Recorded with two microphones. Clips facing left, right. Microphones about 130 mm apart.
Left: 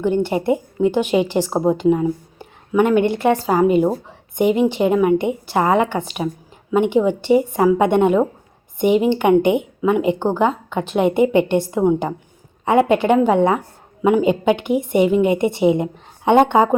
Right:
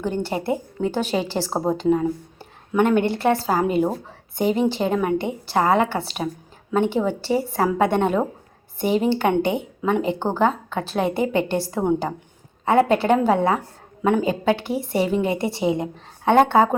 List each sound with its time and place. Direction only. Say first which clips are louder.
0.0 s a woman's voice: left 6 dB; 15° left (ahead or behind)